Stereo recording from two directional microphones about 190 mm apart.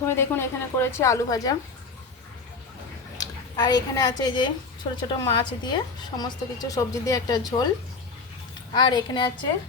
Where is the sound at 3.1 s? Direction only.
20° left (ahead or behind).